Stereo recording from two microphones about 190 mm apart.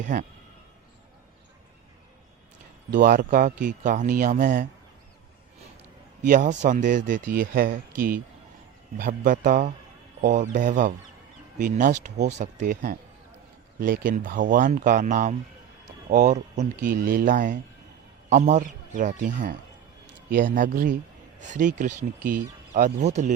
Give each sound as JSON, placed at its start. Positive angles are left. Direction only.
{"t": 0.0, "sound": "speech", "side_deg": -40}
{"t": 2.9, "sound": "speech", "side_deg": -45}
{"t": 6.2, "sound": "speech", "side_deg": -40}